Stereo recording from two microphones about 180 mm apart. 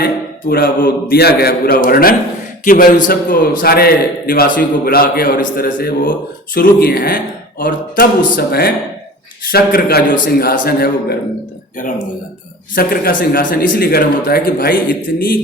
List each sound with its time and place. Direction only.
0.0 s a man's voice: 55° left (ahead or behind)
12.7 s a man's voice: 50° left (ahead or behind)